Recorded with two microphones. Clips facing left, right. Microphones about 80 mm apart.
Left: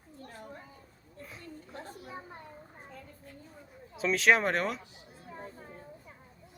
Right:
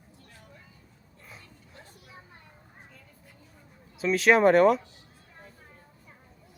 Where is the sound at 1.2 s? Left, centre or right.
Centre.